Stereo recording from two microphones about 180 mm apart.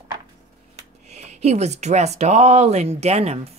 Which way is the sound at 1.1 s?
40° right (ahead or behind).